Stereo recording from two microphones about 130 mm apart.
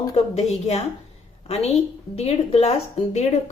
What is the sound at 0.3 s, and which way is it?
A woman's voice, 55° left (ahead or behind).